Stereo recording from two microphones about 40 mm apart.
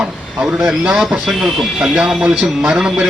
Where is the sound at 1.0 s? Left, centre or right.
Centre.